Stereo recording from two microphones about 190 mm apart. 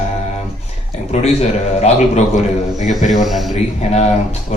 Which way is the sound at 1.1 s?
35° left (ahead or behind).